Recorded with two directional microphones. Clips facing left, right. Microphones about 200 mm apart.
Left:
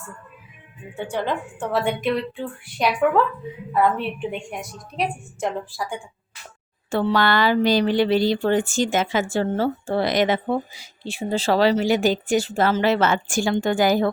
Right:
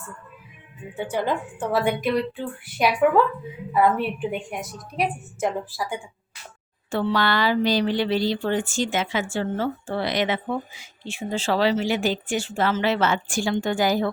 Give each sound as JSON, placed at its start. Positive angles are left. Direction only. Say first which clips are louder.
{"t": 1.1, "sound": "a woman's voice", "louder": "even", "side_deg": -5}
{"t": 6.9, "sound": "speech", "louder": "left 3 dB", "side_deg": 45}